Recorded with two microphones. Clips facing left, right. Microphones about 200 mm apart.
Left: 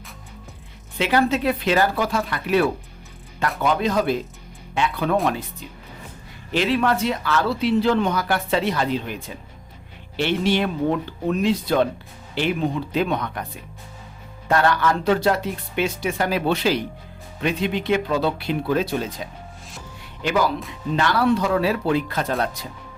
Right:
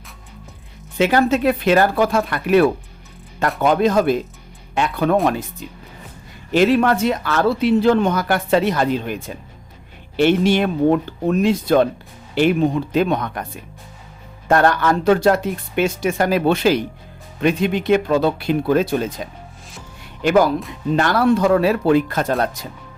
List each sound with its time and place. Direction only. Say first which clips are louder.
0.9 s speech: right 4 dB; 45° right (ahead or behind)
6.5 s speech: right 6 dB; 50° right (ahead or behind)
10.2 s speech: right 6 dB; 50° right (ahead or behind)
12.9 s speech: right 4 dB; 45° right (ahead or behind)
14.4 s speech: right 4 dB; 50° right (ahead or behind)
20.2 s speech: right 6 dB; 50° right (ahead or behind)